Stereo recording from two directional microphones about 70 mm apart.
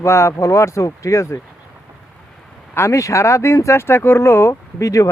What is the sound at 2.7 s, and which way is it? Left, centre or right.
Speech, left.